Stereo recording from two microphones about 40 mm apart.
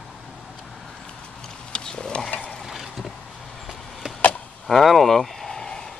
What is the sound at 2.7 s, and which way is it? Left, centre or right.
Vehicle, centre.